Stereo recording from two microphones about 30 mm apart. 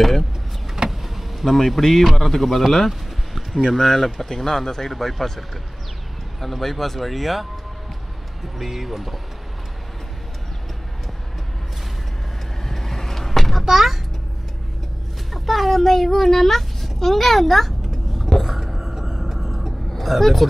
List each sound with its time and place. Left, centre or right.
0.8 s vehicle: centre
1.5 s speech: centre
2.9 s a sound: centre
3.7 s speech: centre
4.9 s speech: centre
6.4 s speech: centre
12.6 s vehicle: centre
13.7 s a child's voice: centre
15.3 s speech: centre
18.4 s whispering: centre
20.0 s speech: centre